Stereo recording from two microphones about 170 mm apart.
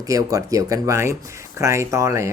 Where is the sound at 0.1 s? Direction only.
20° right (ahead or behind).